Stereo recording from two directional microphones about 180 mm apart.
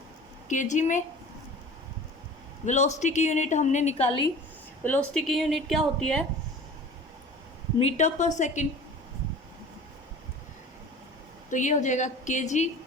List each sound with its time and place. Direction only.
0.4 s a woman's voice: 45° left (ahead or behind)
2.6 s a woman's voice: 40° left (ahead or behind)
4.8 s a woman's voice: 10° left (ahead or behind)
7.8 s a woman's voice: 40° left (ahead or behind)
11.5 s a woman's voice: 40° left (ahead or behind)